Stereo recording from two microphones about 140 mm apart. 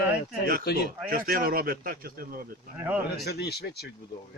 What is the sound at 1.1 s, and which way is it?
Speech, 90° right.